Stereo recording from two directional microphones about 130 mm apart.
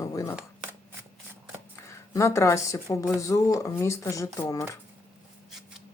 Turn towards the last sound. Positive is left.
turn(degrees=25)  # may be behind; listen again after turning